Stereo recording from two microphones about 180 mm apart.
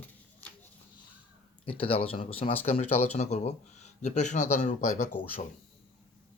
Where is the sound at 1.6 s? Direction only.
30° left (ahead or behind).